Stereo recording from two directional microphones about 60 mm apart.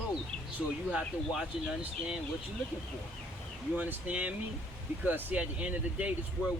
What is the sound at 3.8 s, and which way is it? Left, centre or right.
Speech, right.